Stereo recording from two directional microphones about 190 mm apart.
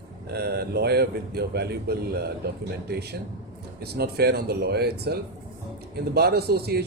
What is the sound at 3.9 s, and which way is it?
A man's voice, 55° right (ahead or behind).